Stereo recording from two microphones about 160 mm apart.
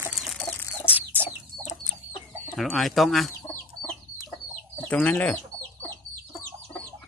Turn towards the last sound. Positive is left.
turn(degrees=10)  # may be behind; listen again after turning